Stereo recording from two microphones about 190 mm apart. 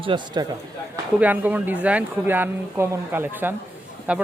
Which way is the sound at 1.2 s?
10° right (ahead or behind).